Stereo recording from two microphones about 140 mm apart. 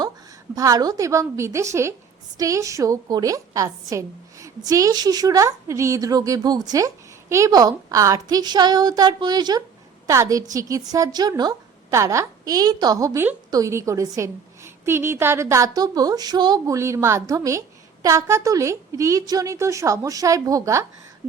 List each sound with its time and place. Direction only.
0.5 s a woman's voice: 25° right (ahead or behind)